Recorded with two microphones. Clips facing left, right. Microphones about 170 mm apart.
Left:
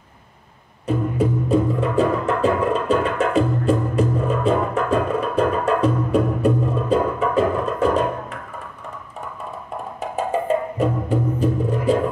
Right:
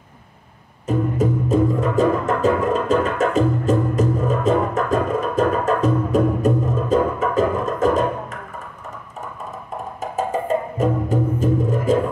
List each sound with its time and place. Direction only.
0.8 s music: 40° right (ahead or behind)
9.9 s music: 40° right (ahead or behind)